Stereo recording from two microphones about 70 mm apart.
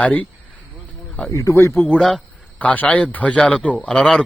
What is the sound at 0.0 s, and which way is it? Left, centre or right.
Speech, left.